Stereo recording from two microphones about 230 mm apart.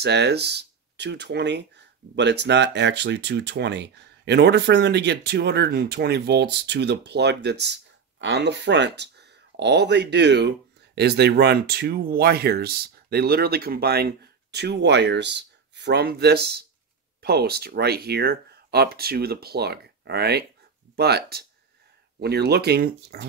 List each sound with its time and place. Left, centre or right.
0.0 s speech: right